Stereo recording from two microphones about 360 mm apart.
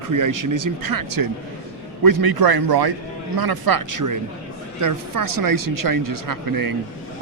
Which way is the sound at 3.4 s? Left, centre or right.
Right.